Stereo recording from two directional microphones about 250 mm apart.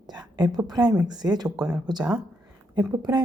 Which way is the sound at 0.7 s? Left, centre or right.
Centre.